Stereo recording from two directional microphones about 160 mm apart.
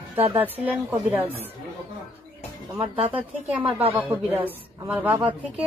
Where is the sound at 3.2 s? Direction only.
10° right (ahead or behind).